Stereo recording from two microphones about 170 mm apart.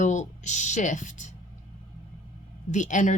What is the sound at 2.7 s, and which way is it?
Speech, 45° left (ahead or behind).